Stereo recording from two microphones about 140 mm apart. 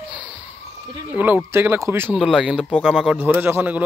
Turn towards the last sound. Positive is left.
turn(degrees=-15)  # may be behind; listen again after turning